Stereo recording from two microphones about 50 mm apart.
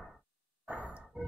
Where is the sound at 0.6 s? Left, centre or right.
Right.